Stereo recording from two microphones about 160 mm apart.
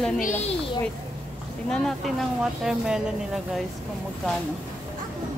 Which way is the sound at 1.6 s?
5° left (ahead or behind).